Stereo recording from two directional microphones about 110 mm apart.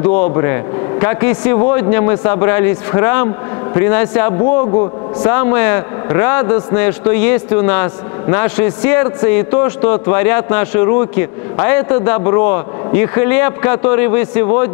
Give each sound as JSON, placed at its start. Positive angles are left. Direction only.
{"t": 0.0, "sound": "a man's voice", "side_deg": 20}